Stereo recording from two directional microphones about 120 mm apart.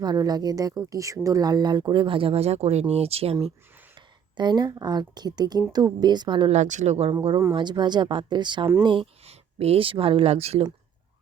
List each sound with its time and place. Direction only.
0.0 s speech: 35° right (ahead or behind); by 3.3 s 55° right (ahead or behind)
3.9 s a woman's voice: 40° right (ahead or behind)
6.5 s speech: 85° right; by 7.1 s 65° right (ahead or behind)
7.1 s speech: 50° right (ahead or behind)
7.5 s speech: 40° right (ahead or behind); by 10.7 s 60° right (ahead or behind)